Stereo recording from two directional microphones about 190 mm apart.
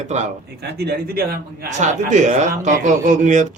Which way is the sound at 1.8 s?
40° right (ahead or behind).